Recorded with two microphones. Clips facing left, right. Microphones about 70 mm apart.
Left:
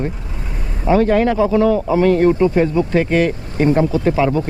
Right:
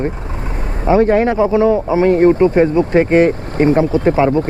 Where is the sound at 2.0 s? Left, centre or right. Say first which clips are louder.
Right 3 dB; right.